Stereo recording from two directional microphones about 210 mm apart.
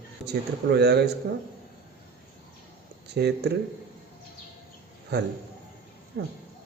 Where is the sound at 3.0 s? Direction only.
50° right (ahead or behind).